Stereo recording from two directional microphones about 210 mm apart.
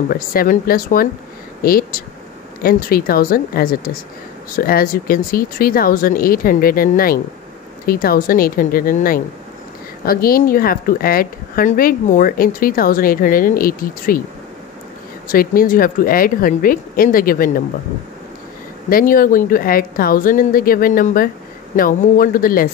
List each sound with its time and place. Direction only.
0.1 s a woman's voice: 45° left (ahead or behind)
15.2 s a woman's voice: 40° left (ahead or behind)
18.9 s a woman's voice: 40° left (ahead or behind)